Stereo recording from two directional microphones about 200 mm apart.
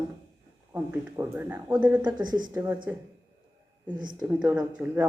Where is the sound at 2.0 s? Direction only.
20° right (ahead or behind).